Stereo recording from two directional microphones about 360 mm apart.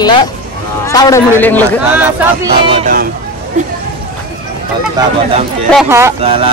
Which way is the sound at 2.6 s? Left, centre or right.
Centre.